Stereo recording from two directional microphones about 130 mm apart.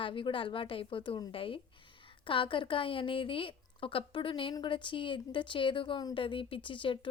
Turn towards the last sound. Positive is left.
turn(degrees=40)  # may be behind; listen again after turning